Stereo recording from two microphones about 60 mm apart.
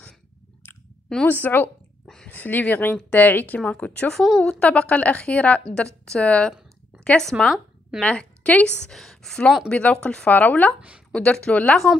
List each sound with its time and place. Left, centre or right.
1.2 s speech: left
4.1 s a woman's voice: centre
4.5 s a woman's voice: left
8.9 s a woman's voice: centre
9.7 s speech: centre
10.3 s speech: left
11.1 s speech: centre